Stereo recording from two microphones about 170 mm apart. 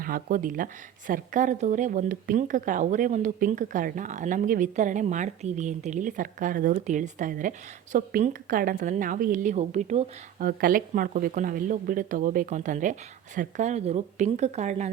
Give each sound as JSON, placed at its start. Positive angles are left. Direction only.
{"t": 0.0, "sound": "speech", "side_deg": -55}
{"t": 10.4, "sound": "speech", "side_deg": -55}